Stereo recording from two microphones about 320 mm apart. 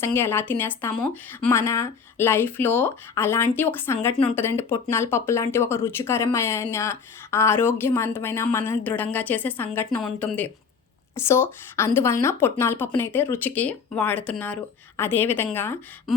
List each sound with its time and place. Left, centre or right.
0.0 s speech: centre